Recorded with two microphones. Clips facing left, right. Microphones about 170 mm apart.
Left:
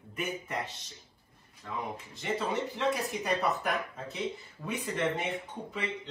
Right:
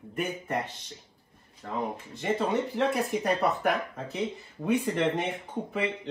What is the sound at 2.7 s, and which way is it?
Speech, 60° right (ahead or behind).